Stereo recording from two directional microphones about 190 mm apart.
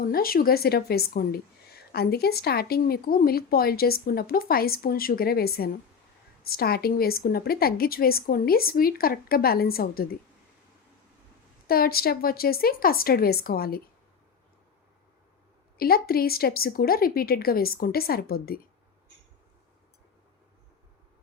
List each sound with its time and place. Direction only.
0.0 s a woman's voice: 50° left (ahead or behind)
11.7 s a woman's voice: 50° left (ahead or behind)
15.8 s a woman's voice: 50° left (ahead or behind)